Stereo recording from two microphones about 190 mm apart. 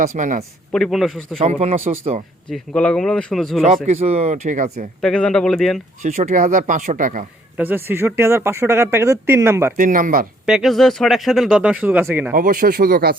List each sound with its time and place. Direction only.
0.2 s speech: 40° right (ahead or behind)
0.7 s speech: centre (ahead or behind)
1.4 s speech: 35° right (ahead or behind)
2.5 s speech: 5° left (ahead or behind)
3.8 s speech: 35° right (ahead or behind)
4.9 s speech: 5° left (ahead or behind)
6.0 s speech: 40° right (ahead or behind)
7.5 s speech: 10° right (ahead or behind)
9.7 s speech: 45° right (ahead or behind)
10.4 s speech: centre (ahead or behind)
12.3 s speech: 50° right (ahead or behind)